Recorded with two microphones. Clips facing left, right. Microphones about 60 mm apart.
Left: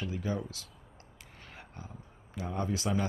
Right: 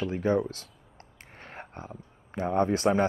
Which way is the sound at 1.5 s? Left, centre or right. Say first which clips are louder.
Right 8 dB; right.